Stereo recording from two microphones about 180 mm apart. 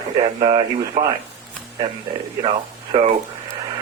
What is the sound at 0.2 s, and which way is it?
Speech, 30° right (ahead or behind).